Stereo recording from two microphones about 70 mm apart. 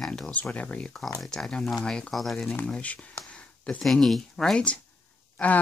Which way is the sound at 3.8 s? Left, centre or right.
Centre.